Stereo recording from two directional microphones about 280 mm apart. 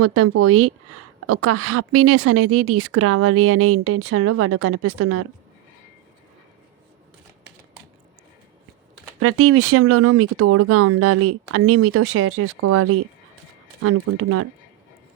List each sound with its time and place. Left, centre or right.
0.0 s speech: right
9.2 s speech: right